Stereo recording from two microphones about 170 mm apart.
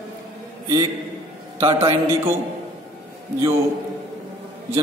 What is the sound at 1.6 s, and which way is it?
Speech, 35° right (ahead or behind).